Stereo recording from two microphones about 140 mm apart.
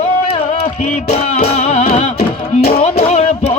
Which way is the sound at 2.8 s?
50° left (ahead or behind).